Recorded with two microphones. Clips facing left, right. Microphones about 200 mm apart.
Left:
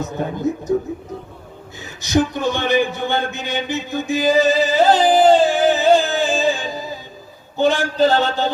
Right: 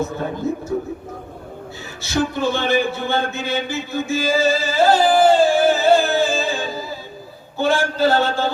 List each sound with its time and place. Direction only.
0.2 s a man's voice: 15° left (ahead or behind)
2.0 s a man's voice: 20° left (ahead or behind)